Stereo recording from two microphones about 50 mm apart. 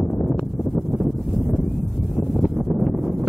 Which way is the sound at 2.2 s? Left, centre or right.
Centre.